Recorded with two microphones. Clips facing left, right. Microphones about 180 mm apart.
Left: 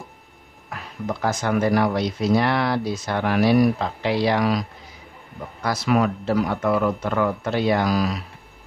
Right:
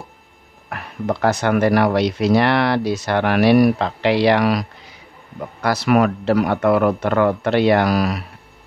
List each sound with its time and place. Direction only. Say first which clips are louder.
0.7 s speech: right 5 dB; 60° right (ahead or behind)